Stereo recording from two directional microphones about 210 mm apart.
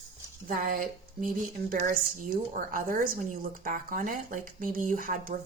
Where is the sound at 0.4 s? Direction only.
40° right (ahead or behind).